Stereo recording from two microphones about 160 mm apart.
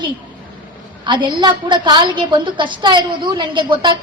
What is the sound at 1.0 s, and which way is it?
A woman's voice, 30° right (ahead or behind).